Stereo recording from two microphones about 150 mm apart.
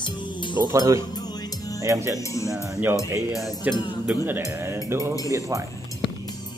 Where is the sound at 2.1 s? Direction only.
20° left (ahead or behind).